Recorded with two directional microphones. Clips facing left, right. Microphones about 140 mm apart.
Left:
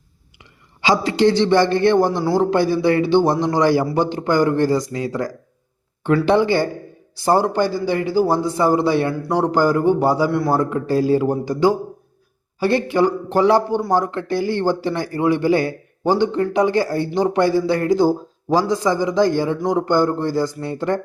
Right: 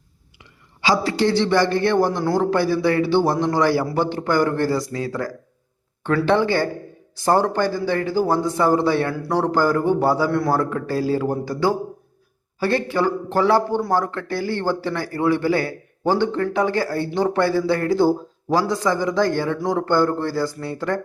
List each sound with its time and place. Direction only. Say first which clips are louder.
0.8 s a man's voice: left 3 dB; 20° left (ahead or behind)